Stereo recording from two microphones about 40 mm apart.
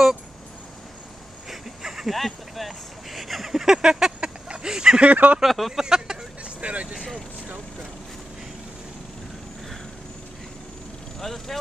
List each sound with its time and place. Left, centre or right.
1.5 s a sound: centre
3.7 s speech: centre
4.2 s a sound: right
5.0 s speech: right
5.4 s speech: centre
5.7 s speech: centre
6.6 s speech: right
11.1 s speech: centre